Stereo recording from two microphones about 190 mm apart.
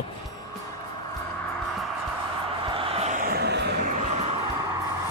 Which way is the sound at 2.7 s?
30° right (ahead or behind).